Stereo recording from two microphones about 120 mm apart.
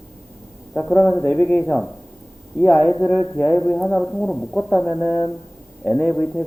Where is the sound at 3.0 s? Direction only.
5° left (ahead or behind).